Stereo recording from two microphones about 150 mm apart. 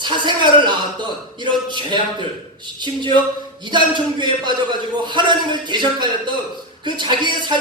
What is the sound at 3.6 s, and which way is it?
A man's voice, 30° right (ahead or behind).